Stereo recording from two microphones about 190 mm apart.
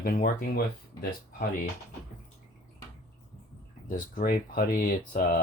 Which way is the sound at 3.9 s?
50° left (ahead or behind).